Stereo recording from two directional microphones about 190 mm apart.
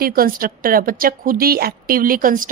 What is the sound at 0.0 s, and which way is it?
A woman's voice, 50° right (ahead or behind).